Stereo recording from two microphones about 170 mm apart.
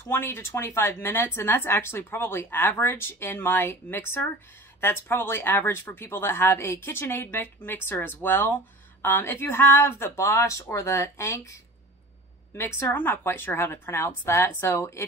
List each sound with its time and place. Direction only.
0.1 s speech: 15° left (ahead or behind)
12.5 s speech: 15° left (ahead or behind)